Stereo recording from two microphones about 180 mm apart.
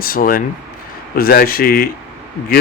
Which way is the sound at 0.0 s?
50° left (ahead or behind).